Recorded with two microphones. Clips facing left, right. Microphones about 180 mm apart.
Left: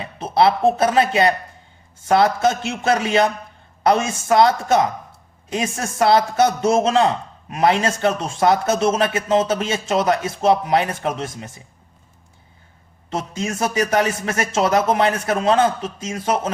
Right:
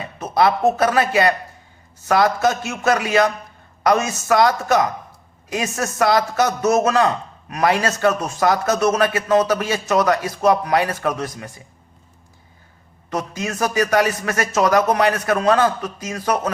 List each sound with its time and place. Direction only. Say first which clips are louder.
0.2 s a man's voice: left 1 dB; 30° left (ahead or behind)
13.1 s a man's voice: even; 25° left (ahead or behind)